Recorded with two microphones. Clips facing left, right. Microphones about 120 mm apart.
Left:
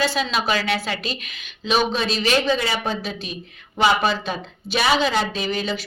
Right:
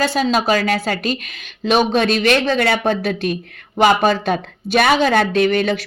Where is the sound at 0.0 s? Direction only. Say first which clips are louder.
Right 5 dB; 45° right (ahead or behind).